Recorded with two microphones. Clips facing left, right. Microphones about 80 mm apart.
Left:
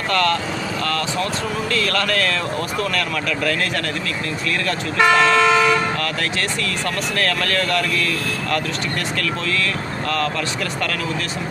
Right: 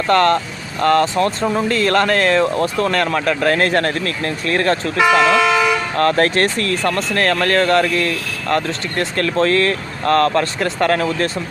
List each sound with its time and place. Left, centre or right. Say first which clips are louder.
0.1 s speech: right 6 dB; right
4.9 s vehicle: even; centre
6.0 s speech: right 9 dB; right